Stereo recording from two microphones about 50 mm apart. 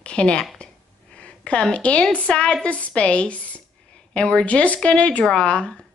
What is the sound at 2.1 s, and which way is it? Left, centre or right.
Speech, centre.